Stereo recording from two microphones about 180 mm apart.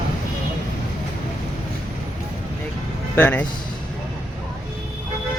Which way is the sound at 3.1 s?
10° left (ahead or behind).